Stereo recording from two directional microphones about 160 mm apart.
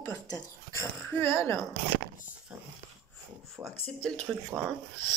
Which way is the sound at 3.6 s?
20° right (ahead or behind).